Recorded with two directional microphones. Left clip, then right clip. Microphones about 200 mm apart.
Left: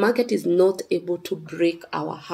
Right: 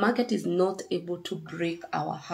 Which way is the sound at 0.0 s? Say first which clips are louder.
Left 6 dB; 35° left (ahead or behind).